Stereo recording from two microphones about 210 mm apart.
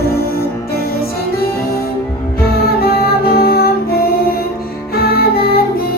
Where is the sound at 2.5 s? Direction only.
45° left (ahead or behind).